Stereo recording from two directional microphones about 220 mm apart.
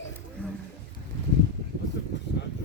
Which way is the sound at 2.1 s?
55° left (ahead or behind).